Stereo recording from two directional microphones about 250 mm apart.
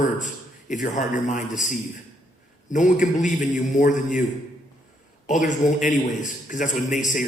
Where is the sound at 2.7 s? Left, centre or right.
Left.